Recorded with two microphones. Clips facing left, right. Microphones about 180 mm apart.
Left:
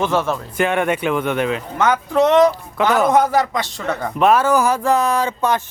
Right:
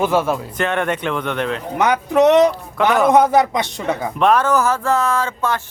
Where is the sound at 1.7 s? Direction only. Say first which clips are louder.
Right 2 dB; 15° right (ahead or behind).